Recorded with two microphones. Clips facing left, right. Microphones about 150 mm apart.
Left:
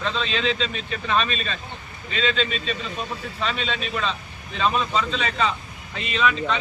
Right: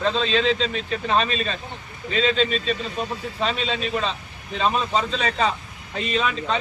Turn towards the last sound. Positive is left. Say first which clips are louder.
# even
turn(degrees=-40)  # may be behind; listen again after turning